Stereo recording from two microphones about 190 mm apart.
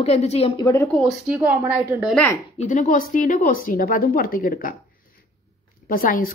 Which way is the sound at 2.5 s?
40° left (ahead or behind).